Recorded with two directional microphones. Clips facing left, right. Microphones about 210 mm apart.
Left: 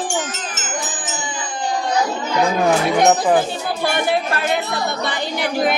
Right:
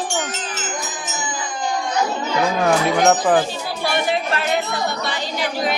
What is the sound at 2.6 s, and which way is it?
Speech, 5° left (ahead or behind).